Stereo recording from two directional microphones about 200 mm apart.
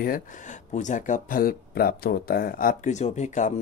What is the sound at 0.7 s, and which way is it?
Speech, 40° left (ahead or behind).